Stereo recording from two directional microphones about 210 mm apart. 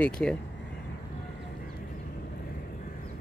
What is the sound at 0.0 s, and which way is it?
Speech, 5° left (ahead or behind).